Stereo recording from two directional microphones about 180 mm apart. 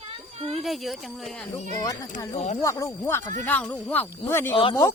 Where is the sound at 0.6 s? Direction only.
Centre (ahead or behind).